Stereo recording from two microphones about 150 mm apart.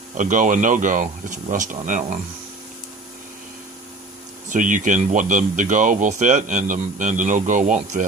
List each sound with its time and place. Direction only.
0.2 s speech: 60° right (ahead or behind)
4.4 s speech: 60° right (ahead or behind)